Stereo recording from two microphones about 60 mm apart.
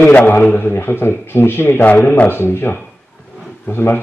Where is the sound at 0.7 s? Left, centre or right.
Left.